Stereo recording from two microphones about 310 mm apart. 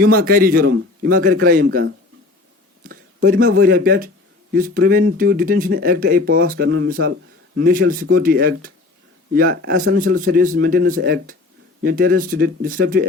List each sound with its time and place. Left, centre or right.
0.0 s speech: right
3.2 s speech: right